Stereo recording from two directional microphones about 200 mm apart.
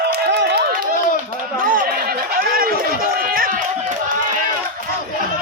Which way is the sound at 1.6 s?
45° right (ahead or behind).